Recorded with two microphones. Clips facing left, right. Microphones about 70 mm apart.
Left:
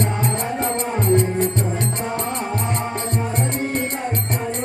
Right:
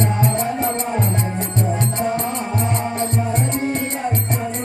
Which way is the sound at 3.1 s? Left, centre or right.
Left.